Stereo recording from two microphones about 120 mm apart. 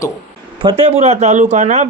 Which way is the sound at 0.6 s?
45° right (ahead or behind).